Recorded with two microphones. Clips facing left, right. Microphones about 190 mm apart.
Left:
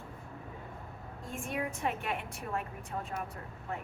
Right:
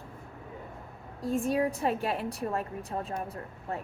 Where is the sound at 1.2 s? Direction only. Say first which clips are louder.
Right 10 dB; 35° right (ahead or behind).